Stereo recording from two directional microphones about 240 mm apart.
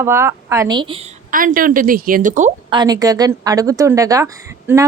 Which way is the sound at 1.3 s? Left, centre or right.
Right.